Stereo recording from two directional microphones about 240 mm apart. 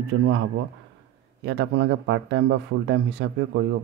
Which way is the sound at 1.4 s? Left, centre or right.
Right.